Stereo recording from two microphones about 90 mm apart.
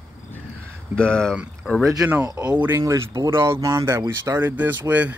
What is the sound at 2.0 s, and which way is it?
Speech, 25° right (ahead or behind).